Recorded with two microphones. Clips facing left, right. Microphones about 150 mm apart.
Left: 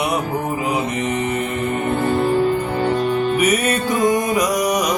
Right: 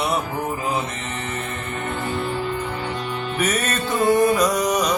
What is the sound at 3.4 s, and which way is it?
Music, 10° left (ahead or behind).